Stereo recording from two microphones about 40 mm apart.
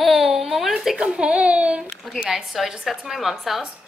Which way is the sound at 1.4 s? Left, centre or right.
Right.